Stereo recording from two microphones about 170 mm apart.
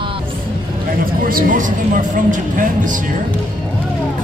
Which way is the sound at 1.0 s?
55° right (ahead or behind).